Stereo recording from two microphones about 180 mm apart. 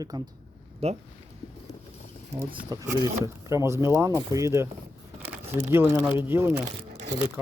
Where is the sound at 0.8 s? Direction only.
35° right (ahead or behind).